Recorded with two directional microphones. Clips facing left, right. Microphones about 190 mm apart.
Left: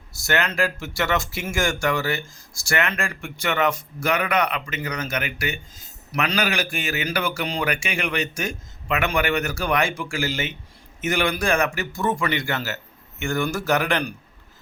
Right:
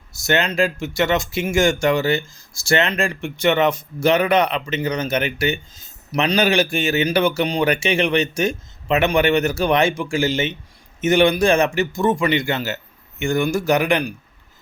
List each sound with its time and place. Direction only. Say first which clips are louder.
0.2 s a man's voice: right 4 dB; 20° right (ahead or behind)